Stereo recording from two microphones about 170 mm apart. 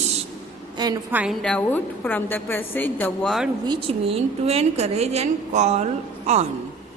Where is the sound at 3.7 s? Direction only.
30° right (ahead or behind).